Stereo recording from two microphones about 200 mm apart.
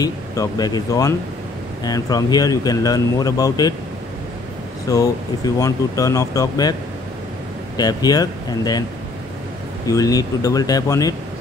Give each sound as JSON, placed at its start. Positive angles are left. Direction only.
{"t": 0.0, "sound": "speech", "side_deg": 20}
{"t": 4.8, "sound": "speech", "side_deg": 15}
{"t": 7.7, "sound": "speech", "side_deg": 20}
{"t": 9.8, "sound": "speech", "side_deg": 15}